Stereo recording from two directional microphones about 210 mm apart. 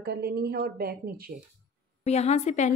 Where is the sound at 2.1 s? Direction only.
30° left (ahead or behind).